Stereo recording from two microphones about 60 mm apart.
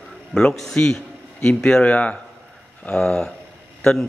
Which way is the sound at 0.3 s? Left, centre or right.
Centre.